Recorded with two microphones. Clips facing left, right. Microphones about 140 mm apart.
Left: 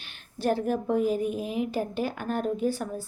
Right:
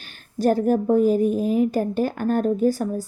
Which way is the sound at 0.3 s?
40° right (ahead or behind).